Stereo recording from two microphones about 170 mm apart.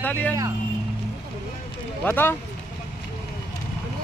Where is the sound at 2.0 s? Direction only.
10° left (ahead or behind).